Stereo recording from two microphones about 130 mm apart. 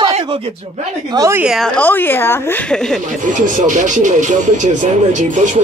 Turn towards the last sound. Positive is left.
turn(degrees=-70)  # may be behind; listen again after turning